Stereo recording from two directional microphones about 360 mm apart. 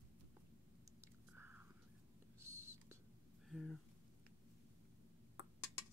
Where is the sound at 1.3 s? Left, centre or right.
Centre.